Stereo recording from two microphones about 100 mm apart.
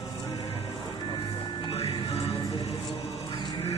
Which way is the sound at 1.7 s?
75° left (ahead or behind).